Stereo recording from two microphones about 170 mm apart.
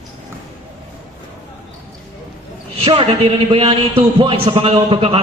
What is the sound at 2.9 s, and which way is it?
A man's voice, 30° right (ahead or behind).